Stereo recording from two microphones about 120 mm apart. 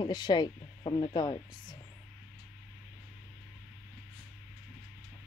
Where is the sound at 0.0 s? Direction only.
40° left (ahead or behind).